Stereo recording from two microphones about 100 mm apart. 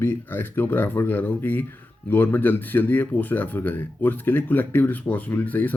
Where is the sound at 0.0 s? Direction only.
20° left (ahead or behind).